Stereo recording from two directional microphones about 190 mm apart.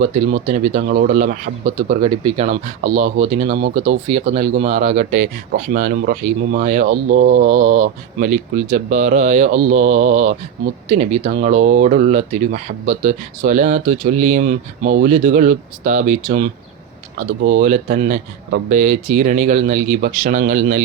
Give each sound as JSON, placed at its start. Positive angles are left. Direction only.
{"t": 0.0, "sound": "speech", "side_deg": -40}
{"t": 1.9, "sound": "speech", "side_deg": -35}
{"t": 17.6, "sound": "speech", "side_deg": -45}